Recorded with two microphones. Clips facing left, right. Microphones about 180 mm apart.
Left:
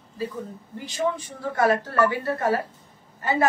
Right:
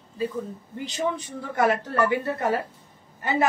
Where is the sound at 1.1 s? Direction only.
20° right (ahead or behind).